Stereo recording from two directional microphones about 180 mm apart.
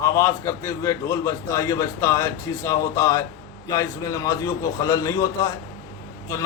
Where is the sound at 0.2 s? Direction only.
15° left (ahead or behind).